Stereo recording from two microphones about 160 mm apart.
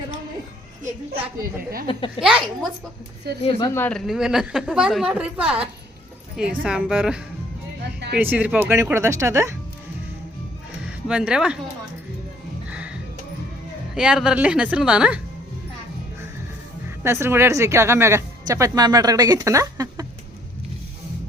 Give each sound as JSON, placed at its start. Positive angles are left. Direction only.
{"t": 2.2, "sound": "a woman's voice", "side_deg": 0}
{"t": 3.4, "sound": "a woman's voice", "side_deg": 35}
{"t": 3.8, "sound": "a woman's voice", "side_deg": 5}
{"t": 11.1, "sound": "speech", "side_deg": -5}
{"t": 12.6, "sound": "music", "side_deg": -10}
{"t": 13.9, "sound": "a woman's voice", "side_deg": -5}
{"t": 17.0, "sound": "speech", "side_deg": -15}